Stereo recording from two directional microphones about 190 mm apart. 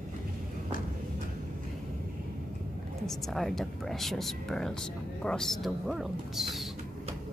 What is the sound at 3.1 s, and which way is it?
Speech, centre (ahead or behind).